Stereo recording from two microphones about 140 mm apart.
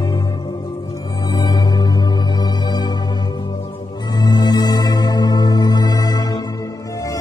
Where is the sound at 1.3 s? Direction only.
30° left (ahead or behind).